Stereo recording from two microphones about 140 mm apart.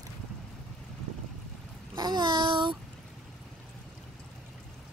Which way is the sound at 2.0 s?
30° right (ahead or behind).